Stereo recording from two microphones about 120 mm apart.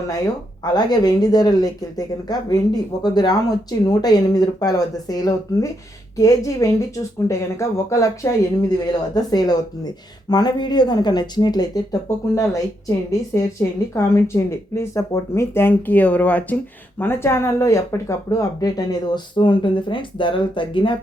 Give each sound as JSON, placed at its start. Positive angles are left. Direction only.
{"t": 0.6, "sound": "speech", "side_deg": 35}